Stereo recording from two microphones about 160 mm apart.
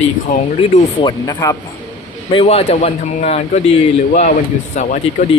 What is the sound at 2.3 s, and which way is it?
A man's voice, 40° left (ahead or behind).